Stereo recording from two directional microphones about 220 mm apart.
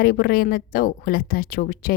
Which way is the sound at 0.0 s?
45° left (ahead or behind).